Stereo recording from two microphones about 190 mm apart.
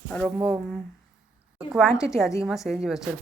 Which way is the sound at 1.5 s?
Centre (ahead or behind).